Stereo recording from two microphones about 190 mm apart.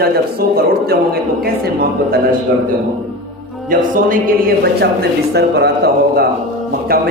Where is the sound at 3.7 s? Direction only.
45° right (ahead or behind).